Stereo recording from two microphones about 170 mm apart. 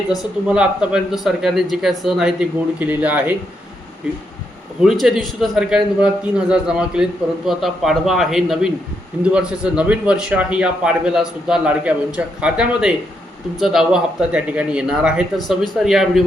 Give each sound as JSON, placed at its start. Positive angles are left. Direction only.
{"t": 0.2, "sound": "a man's voice", "side_deg": -5}
{"t": 4.8, "sound": "a man's voice", "side_deg": 0}